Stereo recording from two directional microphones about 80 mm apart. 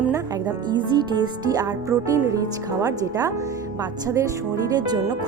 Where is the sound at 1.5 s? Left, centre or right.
Right.